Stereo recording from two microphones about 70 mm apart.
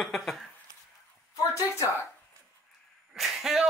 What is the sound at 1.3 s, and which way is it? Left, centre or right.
Speech, left.